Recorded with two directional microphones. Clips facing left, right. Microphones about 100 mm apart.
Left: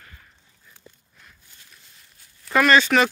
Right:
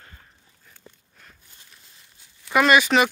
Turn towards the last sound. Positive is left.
turn(degrees=-10)  # may be behind; listen again after turning